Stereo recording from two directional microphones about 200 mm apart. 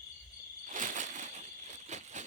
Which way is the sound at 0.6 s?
40° right (ahead or behind).